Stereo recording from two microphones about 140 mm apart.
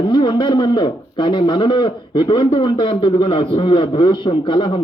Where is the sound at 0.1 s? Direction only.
35° left (ahead or behind).